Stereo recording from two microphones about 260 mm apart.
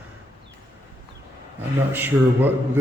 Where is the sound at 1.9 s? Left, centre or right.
Centre.